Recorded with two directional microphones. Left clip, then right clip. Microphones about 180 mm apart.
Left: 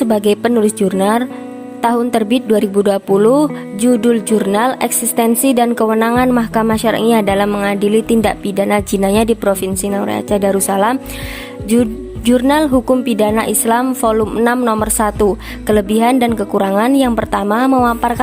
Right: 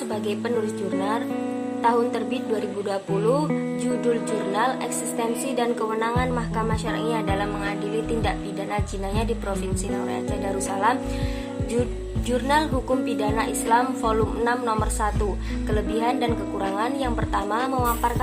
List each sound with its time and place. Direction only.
0.1 s speech: 60° left (ahead or behind)